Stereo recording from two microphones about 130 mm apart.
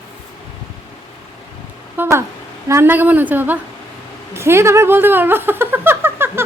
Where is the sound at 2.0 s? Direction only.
15° right (ahead or behind).